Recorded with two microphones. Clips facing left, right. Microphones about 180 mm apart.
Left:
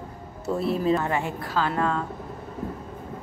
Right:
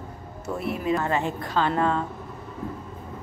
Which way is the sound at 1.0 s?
15° left (ahead or behind).